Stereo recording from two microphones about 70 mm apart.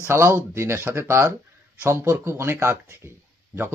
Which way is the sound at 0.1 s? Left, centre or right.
Right.